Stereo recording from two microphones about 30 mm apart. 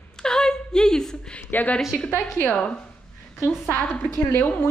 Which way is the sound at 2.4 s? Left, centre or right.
Left.